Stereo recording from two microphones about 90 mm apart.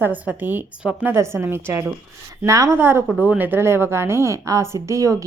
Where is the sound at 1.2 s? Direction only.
30° right (ahead or behind).